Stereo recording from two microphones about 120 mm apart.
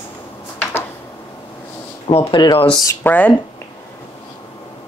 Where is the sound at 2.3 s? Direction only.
35° left (ahead or behind).